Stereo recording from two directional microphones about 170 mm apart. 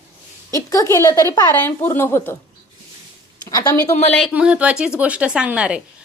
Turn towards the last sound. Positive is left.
turn(degrees=-5)  # may be behind; listen again after turning